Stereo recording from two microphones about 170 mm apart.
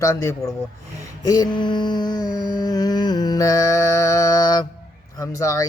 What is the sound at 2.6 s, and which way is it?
Music, 20° left (ahead or behind).